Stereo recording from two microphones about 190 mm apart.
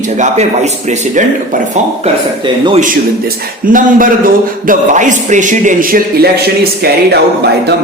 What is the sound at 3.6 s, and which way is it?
Speech, 45° right (ahead or behind).